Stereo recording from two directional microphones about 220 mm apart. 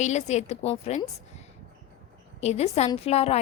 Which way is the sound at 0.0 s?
30° left (ahead or behind).